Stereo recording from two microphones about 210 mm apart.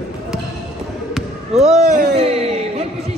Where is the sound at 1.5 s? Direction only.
30° right (ahead or behind).